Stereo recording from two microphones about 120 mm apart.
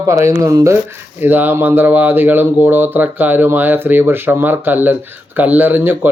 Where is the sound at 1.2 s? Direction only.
15° right (ahead or behind).